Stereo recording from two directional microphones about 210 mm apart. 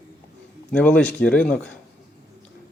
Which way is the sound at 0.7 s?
5° left (ahead or behind).